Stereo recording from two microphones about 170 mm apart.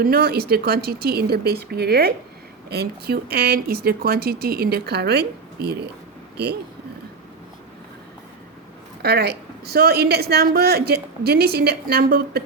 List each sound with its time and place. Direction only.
0.0 s speech: 65° right (ahead or behind)
6.3 s speech: 70° right (ahead or behind)
9.0 s a woman's voice: 70° right (ahead or behind)